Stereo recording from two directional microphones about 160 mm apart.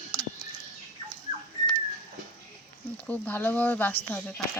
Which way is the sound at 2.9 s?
10° left (ahead or behind).